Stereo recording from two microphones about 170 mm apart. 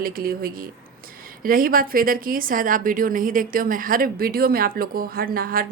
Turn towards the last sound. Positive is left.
turn(degrees=-60)  # may be behind; listen again after turning